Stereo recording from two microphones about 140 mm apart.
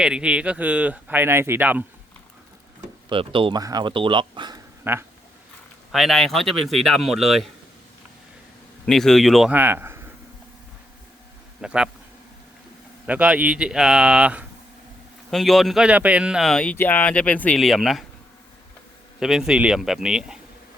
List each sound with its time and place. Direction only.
0.0 s speech: 5° right (ahead or behind)
3.1 s speech: 40° right (ahead or behind)
3.6 s speech: 30° right (ahead or behind)
4.8 s speech: 15° right (ahead or behind)
5.9 s speech: centre (ahead or behind)
8.9 s speech: 5° left (ahead or behind)
9.5 s a man's voice: 15° right (ahead or behind)
11.6 s speech: 5° right (ahead or behind)
13.1 s speech: 10° right (ahead or behind)
19.2 s speech: 5° right (ahead or behind)